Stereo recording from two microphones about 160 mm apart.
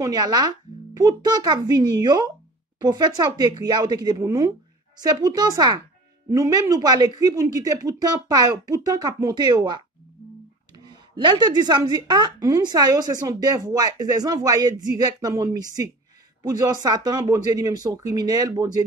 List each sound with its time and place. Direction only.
0.0 s speech: 25° right (ahead or behind)